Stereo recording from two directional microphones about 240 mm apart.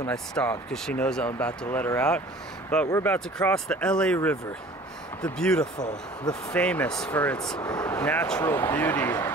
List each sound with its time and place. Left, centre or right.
0.0 s speech: centre
7.5 s speech: centre
7.8 s speech: centre